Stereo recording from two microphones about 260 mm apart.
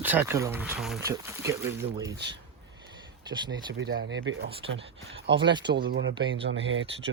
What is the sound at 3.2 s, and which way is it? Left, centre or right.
Speech, centre.